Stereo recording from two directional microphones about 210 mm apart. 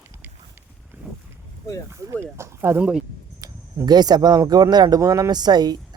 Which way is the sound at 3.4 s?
20° right (ahead or behind).